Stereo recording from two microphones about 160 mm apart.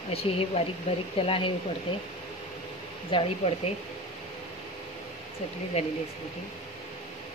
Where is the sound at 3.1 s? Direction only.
35° left (ahead or behind).